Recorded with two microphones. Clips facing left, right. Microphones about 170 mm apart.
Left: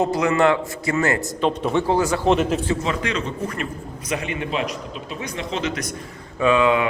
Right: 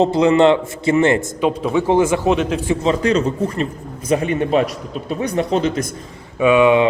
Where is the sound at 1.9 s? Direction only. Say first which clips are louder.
Right 8 dB; 20° right (ahead or behind).